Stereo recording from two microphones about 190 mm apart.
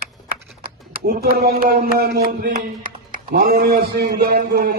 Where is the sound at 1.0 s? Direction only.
55° right (ahead or behind).